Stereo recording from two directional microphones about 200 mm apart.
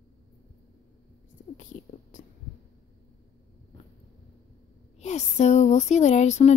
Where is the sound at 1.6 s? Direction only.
40° left (ahead or behind).